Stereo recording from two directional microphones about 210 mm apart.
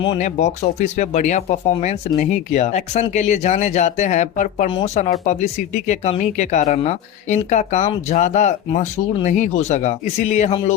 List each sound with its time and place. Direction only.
0.0 s speech: 30° left (ahead or behind)